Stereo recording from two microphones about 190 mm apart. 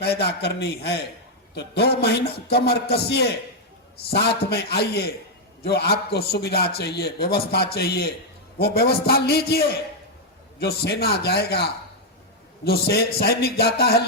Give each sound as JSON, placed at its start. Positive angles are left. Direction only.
{"t": 0.0, "sound": "a man's voice", "side_deg": 60}